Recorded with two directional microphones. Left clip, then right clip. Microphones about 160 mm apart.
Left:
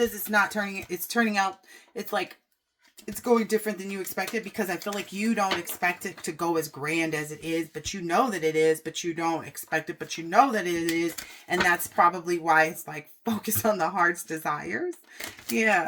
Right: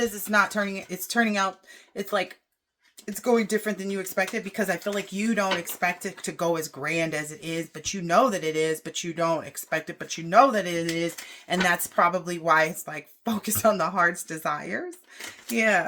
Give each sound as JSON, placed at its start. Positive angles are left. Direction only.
{"t": 0.0, "sound": "speech", "side_deg": -30}